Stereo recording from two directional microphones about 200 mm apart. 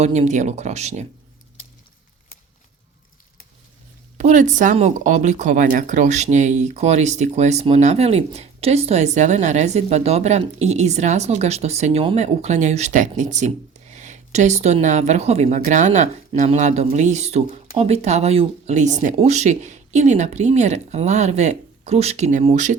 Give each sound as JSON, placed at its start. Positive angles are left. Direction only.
{"t": 0.0, "sound": "speech", "side_deg": -35}
{"t": 4.2, "sound": "speech", "side_deg": -35}